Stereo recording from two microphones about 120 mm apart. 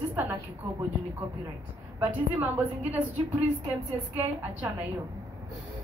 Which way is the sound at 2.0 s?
15° right (ahead or behind).